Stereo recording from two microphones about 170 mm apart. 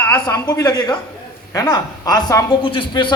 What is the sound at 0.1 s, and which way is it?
A man's voice, 20° left (ahead or behind).